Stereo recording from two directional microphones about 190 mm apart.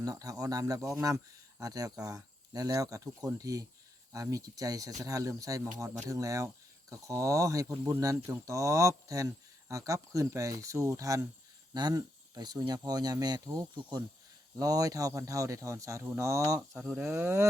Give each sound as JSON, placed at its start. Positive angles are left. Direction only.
{"t": 0.0, "sound": "speech", "side_deg": -20}